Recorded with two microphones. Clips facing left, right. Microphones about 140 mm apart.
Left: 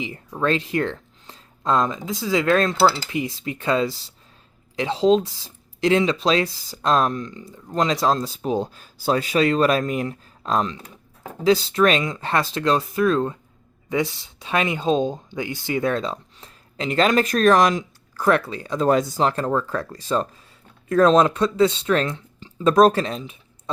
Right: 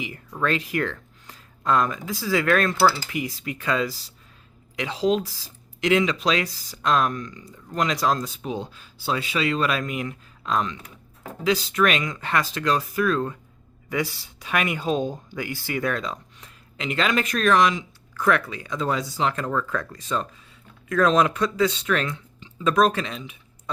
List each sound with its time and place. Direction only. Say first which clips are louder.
0.0 s speech: left 3 dB; 20° left (ahead or behind)
18.9 s speech: left 6 dB; 50° left (ahead or behind); by 23.7 s 30° left (ahead or behind)